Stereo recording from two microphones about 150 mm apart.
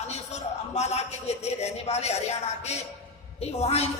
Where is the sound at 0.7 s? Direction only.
45° left (ahead or behind).